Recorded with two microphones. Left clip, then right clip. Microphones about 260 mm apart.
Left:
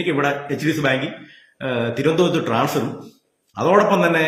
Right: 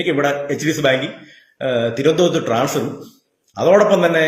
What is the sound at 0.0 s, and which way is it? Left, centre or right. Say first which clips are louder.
A man's voice: right 3 dB; centre.